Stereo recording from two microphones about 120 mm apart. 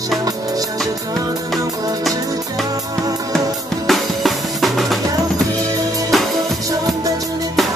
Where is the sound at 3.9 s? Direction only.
Centre (ahead or behind).